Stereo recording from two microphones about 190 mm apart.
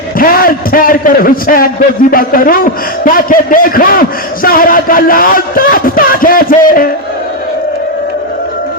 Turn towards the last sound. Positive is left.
turn(degrees=45)  # may be behind; listen again after turning